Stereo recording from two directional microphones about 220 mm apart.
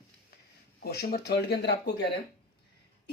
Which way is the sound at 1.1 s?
50° left (ahead or behind).